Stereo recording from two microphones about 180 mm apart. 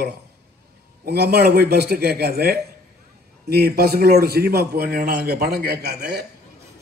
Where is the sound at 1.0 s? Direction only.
60° right (ahead or behind).